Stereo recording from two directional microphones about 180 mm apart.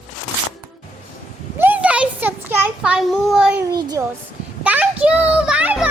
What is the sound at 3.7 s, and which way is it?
Speech, 20° right (ahead or behind).